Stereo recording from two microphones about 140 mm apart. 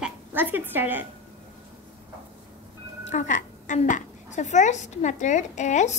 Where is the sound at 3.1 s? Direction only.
65° left (ahead or behind).